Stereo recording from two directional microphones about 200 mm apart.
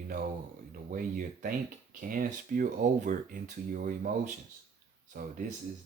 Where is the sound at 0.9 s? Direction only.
45° right (ahead or behind).